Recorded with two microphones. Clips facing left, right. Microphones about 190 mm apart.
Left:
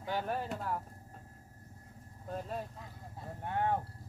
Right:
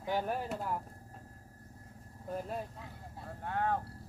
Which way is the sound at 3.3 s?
20° left (ahead or behind).